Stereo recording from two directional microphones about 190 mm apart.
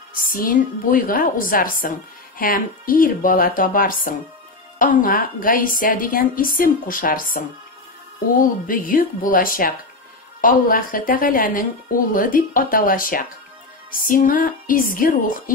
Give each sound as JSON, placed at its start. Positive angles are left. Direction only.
{"t": 0.1, "sound": "a woman's voice", "side_deg": 50}